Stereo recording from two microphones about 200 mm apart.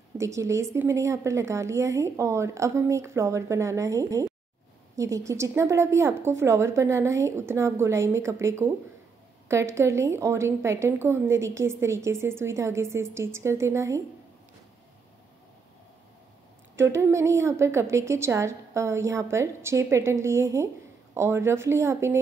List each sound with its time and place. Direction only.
0.2 s a woman's voice: 15° right (ahead or behind)
16.7 s a woman's voice: 15° right (ahead or behind)